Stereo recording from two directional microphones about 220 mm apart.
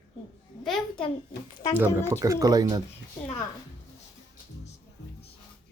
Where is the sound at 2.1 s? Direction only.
15° right (ahead or behind).